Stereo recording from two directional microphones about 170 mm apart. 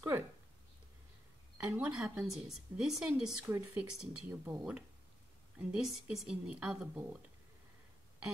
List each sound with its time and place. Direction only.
1.6 s speech: 10° right (ahead or behind)
3.4 s speech: 15° right (ahead or behind)
4.0 s speech: 5° right (ahead or behind)